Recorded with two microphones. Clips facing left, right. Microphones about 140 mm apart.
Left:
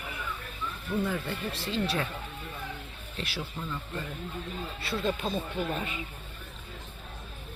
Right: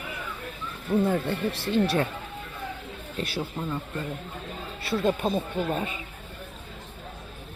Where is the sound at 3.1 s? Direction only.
45° right (ahead or behind).